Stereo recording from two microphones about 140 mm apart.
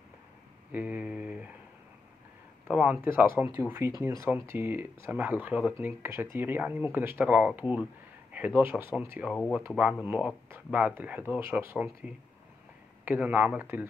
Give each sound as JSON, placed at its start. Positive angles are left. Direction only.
{"t": 0.7, "sound": "a sound", "side_deg": -10}
{"t": 2.7, "sound": "speech", "side_deg": -10}
{"t": 9.3, "sound": "speech", "side_deg": 0}